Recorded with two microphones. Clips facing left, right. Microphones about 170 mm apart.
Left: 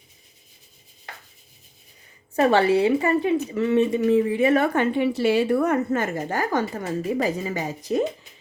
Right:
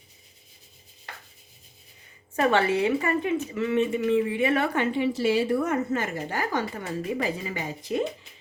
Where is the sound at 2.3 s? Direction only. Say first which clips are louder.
Left 4 dB; 35° left (ahead or behind).